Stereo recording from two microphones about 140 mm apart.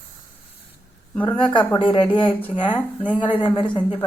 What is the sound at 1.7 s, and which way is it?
Speech, 35° left (ahead or behind).